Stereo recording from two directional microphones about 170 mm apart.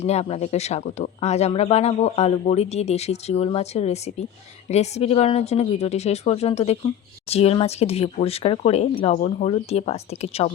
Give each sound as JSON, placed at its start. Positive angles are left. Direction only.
{"t": 0.0, "sound": "speech", "side_deg": 40}